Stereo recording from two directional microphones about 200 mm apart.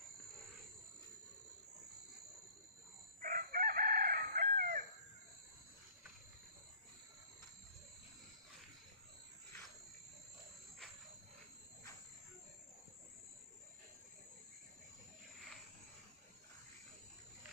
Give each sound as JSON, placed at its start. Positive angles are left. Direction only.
{"t": 3.2, "sound": "chicken", "side_deg": -45}